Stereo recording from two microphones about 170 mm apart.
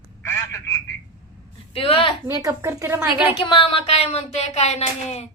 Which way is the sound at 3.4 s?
30° left (ahead or behind).